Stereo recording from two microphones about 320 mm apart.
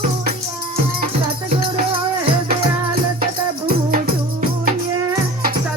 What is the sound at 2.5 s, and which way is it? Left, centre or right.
Music, right.